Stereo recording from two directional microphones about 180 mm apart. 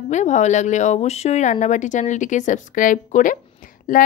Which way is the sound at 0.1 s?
40° left (ahead or behind).